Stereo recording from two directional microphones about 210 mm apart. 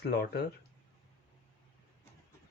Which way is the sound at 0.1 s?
50° left (ahead or behind).